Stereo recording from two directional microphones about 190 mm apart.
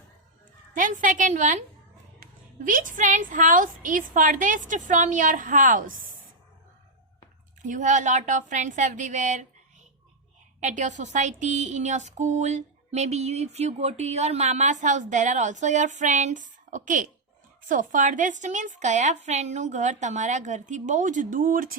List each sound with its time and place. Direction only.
0.8 s a woman's voice: 45° right (ahead or behind)
7.6 s a woman's voice: 40° right (ahead or behind)
10.6 s a woman's voice: 40° right (ahead or behind)